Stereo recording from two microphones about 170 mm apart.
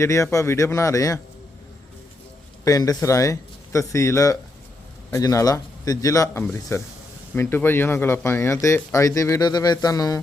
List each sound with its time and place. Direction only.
0.0 s speech: 15° left (ahead or behind)
2.6 s speech: 20° left (ahead or behind)